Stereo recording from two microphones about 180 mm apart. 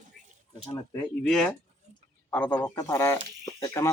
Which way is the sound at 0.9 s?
5° left (ahead or behind).